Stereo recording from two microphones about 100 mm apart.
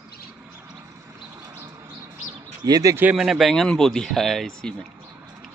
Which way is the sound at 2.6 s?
40° right (ahead or behind).